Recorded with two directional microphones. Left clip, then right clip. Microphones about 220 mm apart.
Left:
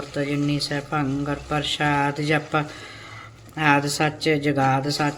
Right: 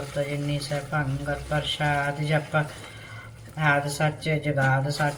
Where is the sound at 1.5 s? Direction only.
60° left (ahead or behind).